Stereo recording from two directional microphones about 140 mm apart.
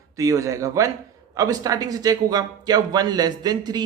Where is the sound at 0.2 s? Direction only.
25° right (ahead or behind).